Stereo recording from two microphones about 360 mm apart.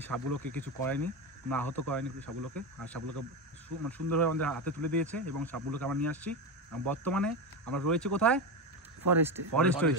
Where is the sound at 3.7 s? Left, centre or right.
Right.